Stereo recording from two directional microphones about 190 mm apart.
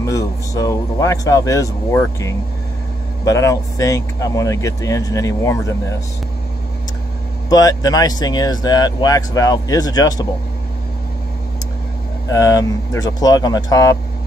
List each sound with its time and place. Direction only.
0.0 s speech: 15° left (ahead or behind)
7.4 s speech: 20° left (ahead or behind)
12.3 s speech: 20° left (ahead or behind)